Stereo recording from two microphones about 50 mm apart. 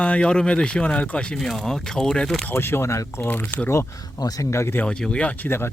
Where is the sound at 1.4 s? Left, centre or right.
Centre.